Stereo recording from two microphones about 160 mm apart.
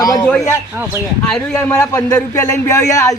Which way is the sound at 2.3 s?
20° left (ahead or behind).